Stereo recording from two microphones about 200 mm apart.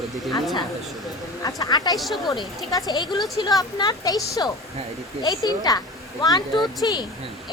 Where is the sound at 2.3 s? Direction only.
15° left (ahead or behind).